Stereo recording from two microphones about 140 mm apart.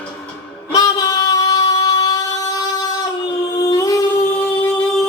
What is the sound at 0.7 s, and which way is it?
Singing, 25° left (ahead or behind).